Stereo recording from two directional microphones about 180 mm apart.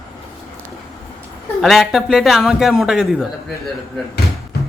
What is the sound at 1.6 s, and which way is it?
A man's voice, centre (ahead or behind).